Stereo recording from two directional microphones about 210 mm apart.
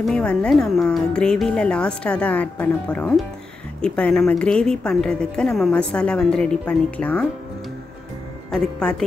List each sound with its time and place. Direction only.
0.0 s a woman's voice: 5° left (ahead or behind)
8.5 s a woman's voice: 5° left (ahead or behind)